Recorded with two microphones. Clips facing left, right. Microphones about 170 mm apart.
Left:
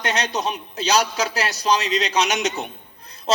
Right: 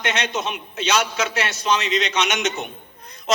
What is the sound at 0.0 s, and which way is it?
A man's voice, 35° left (ahead or behind).